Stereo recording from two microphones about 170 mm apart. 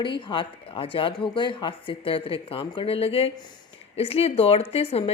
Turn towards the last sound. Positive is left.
turn(degrees=35)  # may be behind; listen again after turning